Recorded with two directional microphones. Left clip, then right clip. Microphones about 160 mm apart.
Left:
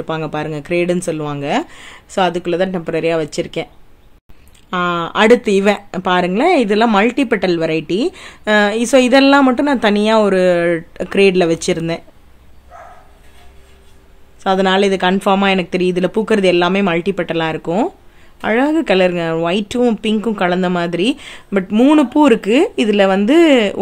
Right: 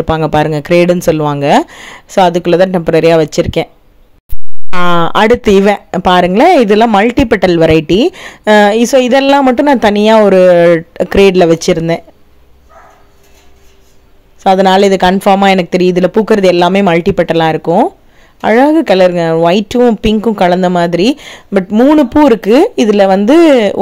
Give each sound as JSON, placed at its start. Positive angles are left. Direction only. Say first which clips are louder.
{"t": 0.0, "sound": "chopping", "louder": "right 10 dB", "side_deg": -45}
{"t": 4.6, "sound": "speech", "louder": "right 6 dB", "side_deg": -40}
{"t": 14.4, "sound": "speech", "louder": "right 7 dB", "side_deg": -35}
{"t": 21.6, "sound": "speech", "louder": "right 4 dB", "side_deg": -20}